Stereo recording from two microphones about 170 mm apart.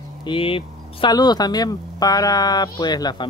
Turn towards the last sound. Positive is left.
turn(degrees=25)  # may be behind; listen again after turning